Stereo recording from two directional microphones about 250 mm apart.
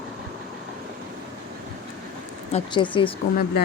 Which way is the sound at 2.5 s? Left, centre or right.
Centre.